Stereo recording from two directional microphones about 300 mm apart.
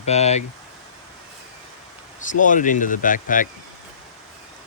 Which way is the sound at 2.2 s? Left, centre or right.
Left.